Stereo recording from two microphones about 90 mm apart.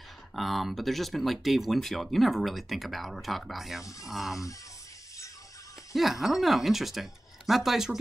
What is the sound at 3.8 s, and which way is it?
Speech, 40° left (ahead or behind).